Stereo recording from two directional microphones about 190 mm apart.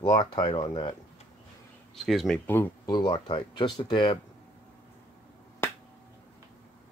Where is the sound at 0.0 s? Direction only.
25° left (ahead or behind).